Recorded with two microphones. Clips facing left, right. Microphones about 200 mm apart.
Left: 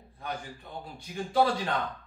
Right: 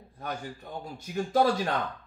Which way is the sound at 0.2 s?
45° right (ahead or behind).